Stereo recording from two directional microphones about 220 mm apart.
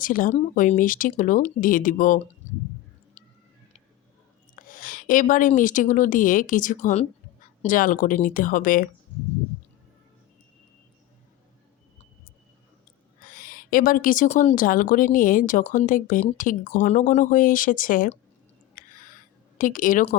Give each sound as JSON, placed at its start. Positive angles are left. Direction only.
{"t": 0.0, "sound": "speech", "side_deg": 40}
{"t": 4.5, "sound": "a woman's voice", "side_deg": 35}
{"t": 13.2, "sound": "speech", "side_deg": 40}
{"t": 18.7, "sound": "a sound", "side_deg": 35}